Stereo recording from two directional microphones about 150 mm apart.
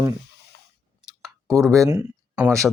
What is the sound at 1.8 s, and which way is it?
Speech, 20° right (ahead or behind).